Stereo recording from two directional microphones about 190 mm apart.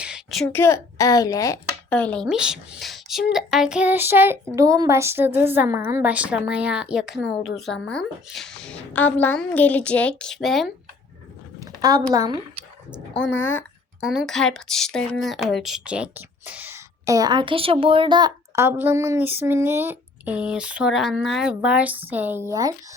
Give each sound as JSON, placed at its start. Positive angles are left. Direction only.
{"t": 0.0, "sound": "a sound", "side_deg": 0}
{"t": 0.5, "sound": "a woman's voice", "side_deg": 15}
{"t": 1.9, "sound": "a woman's voice", "side_deg": 5}
{"t": 11.6, "sound": "a woman's voice", "side_deg": -20}
{"t": 13.2, "sound": "a woman's voice", "side_deg": 10}
{"t": 14.0, "sound": "a woman's voice", "side_deg": 0}
{"t": 18.5, "sound": "speech", "side_deg": -10}